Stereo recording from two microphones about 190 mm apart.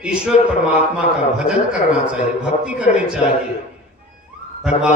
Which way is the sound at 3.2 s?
30° left (ahead or behind).